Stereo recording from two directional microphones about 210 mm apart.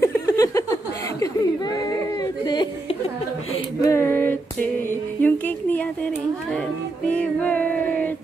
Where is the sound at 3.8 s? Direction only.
15° left (ahead or behind).